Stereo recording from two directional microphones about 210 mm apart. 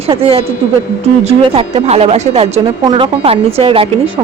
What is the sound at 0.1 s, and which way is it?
A woman's voice, 25° right (ahead or behind).